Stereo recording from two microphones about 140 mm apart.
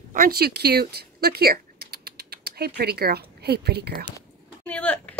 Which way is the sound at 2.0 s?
90° right.